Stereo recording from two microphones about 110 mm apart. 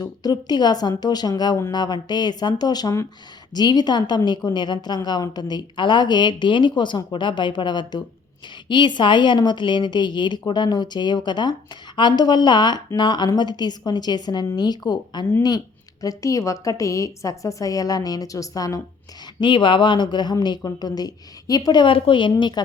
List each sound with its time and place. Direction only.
0.0 s a woman's voice: 35° left (ahead or behind)
19.4 s a woman's voice: 45° left (ahead or behind)